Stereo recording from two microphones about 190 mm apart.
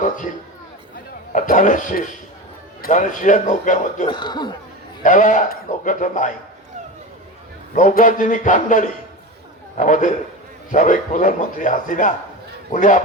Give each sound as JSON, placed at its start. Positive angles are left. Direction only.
{"t": 1.3, "sound": "a man's voice", "side_deg": 40}
{"t": 4.0, "sound": "speech", "side_deg": 25}
{"t": 5.0, "sound": "speech", "side_deg": 40}
{"t": 7.8, "sound": "a man's voice", "side_deg": 40}